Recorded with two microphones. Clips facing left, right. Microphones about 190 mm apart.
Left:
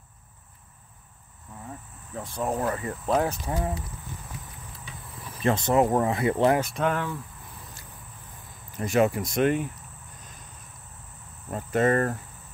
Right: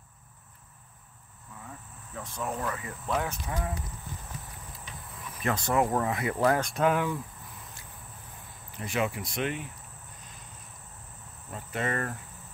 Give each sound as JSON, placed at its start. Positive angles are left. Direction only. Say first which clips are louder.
{"t": 2.1, "sound": "speech", "louder": "left 6 dB", "side_deg": 35}
{"t": 5.2, "sound": "speech", "louder": "left 6 dB", "side_deg": 25}
{"t": 6.6, "sound": "speech", "louder": "right 1 dB", "side_deg": 0}
{"t": 8.7, "sound": "speech", "louder": "left 8 dB", "side_deg": 45}
{"t": 11.5, "sound": "speech", "louder": "left 9 dB", "side_deg": 45}